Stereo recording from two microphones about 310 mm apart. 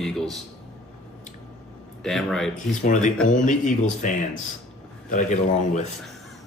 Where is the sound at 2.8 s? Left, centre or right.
Left.